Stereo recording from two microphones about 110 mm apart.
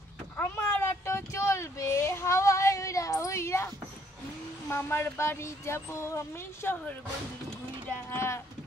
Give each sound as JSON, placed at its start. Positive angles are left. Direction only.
{"t": 0.4, "sound": "a sound", "side_deg": 20}
{"t": 4.6, "sound": "speech", "side_deg": 20}
{"t": 8.1, "sound": "speech", "side_deg": 25}